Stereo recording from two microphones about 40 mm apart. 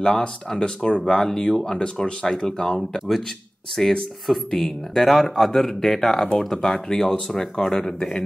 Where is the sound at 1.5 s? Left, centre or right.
Centre.